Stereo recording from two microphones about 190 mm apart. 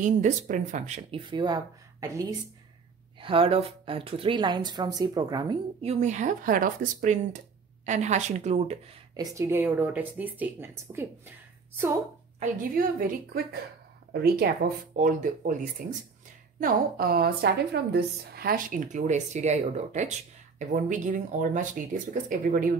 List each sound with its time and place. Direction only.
0.0 s speech: 40° right (ahead or behind); by 2.2 s 15° right (ahead or behind)
3.2 s a woman's voice: 30° right (ahead or behind)
5.8 s speech: 35° right (ahead or behind)
9.1 s speech: 15° right (ahead or behind)
12.4 s a woman's voice: 50° right (ahead or behind)
15.0 s a woman's voice: 45° right (ahead or behind)